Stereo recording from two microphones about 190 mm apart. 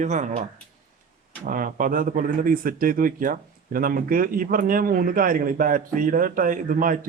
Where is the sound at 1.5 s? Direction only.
45° right (ahead or behind).